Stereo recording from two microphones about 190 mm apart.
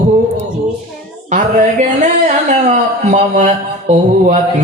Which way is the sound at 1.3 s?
40° right (ahead or behind).